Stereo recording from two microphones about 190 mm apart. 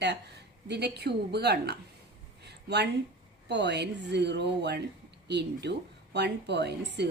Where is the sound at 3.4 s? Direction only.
65° right (ahead or behind).